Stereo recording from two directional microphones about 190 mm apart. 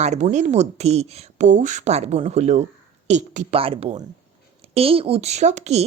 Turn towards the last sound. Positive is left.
turn(degrees=-35)  # may be behind; listen again after turning